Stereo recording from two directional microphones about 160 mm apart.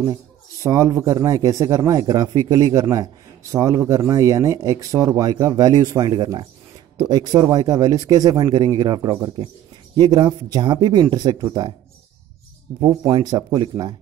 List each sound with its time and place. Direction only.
0.0 s a man's voice: 25° right (ahead or behind)
12.8 s a man's voice: 25° right (ahead or behind)